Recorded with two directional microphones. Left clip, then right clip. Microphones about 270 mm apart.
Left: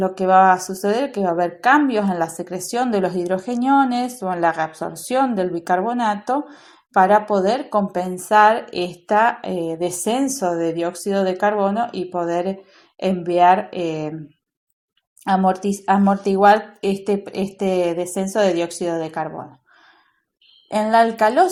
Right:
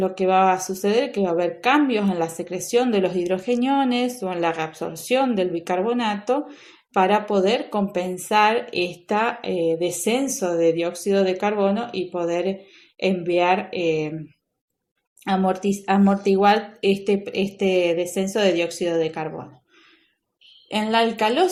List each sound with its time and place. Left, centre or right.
0.0 s speech: centre
15.2 s speech: centre
20.7 s speech: left